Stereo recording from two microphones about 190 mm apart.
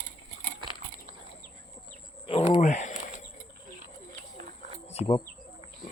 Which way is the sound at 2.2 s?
30° left (ahead or behind).